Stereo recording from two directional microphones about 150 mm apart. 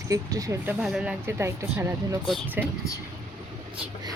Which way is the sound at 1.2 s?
20° right (ahead or behind).